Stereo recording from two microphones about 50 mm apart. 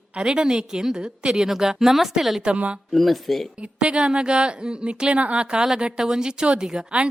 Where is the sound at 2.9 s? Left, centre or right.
Centre.